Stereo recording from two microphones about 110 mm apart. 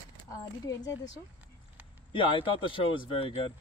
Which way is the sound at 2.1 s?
50° left (ahead or behind).